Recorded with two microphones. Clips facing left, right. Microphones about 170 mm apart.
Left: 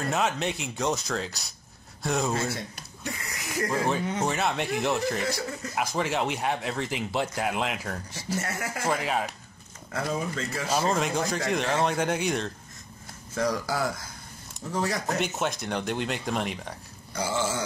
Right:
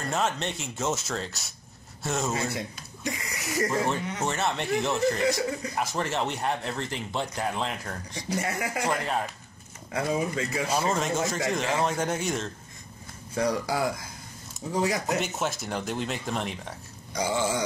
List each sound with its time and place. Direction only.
0.1 s speech: centre (ahead or behind)
9.9 s speech: 10° right (ahead or behind)
13.3 s speech: 10° right (ahead or behind)
15.1 s speech: 5° right (ahead or behind)